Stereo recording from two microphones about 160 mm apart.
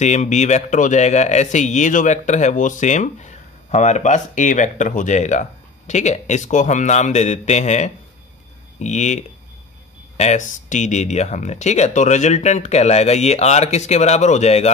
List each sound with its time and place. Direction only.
0.0 s speech: 45° left (ahead or behind)